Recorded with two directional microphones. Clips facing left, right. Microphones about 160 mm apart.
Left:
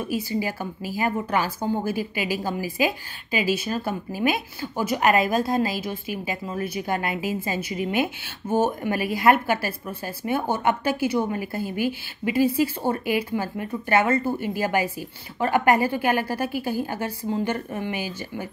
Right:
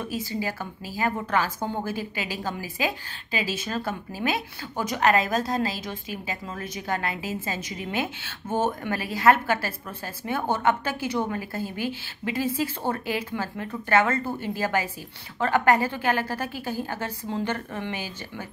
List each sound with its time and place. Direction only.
0.0 s a woman's voice: 10° left (ahead or behind)